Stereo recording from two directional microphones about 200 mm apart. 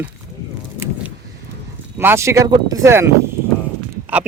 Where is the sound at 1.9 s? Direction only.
10° right (ahead or behind).